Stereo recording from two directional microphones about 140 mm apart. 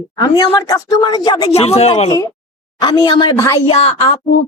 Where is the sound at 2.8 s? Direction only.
30° left (ahead or behind).